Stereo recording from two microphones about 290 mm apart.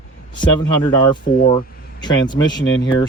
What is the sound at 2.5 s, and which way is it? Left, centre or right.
Speech, left.